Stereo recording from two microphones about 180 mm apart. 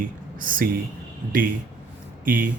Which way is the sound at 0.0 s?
50° right (ahead or behind).